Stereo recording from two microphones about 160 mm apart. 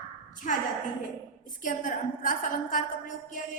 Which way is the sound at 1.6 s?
55° left (ahead or behind).